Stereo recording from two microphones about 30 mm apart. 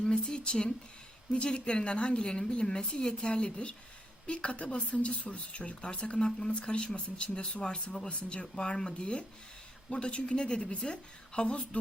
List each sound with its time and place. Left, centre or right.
0.0 s speech: left